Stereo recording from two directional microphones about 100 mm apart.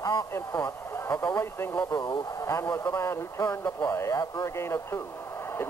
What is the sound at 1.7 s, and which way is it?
Speech, 45° left (ahead or behind).